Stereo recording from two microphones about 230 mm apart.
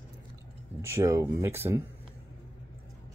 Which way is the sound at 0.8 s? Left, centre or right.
Centre.